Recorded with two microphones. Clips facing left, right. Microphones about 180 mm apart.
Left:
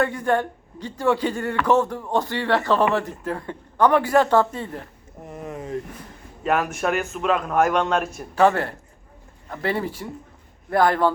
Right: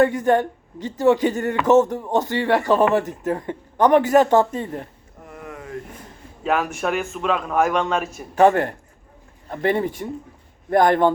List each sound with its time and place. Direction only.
0.3 s speech: 15° right (ahead or behind)
5.2 s a sound: 20° left (ahead or behind)
6.4 s a man's voice: centre (ahead or behind)
8.4 s speech: 20° right (ahead or behind)